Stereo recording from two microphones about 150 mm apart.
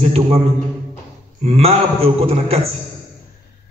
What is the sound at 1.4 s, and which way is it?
A man's voice, 40° right (ahead or behind).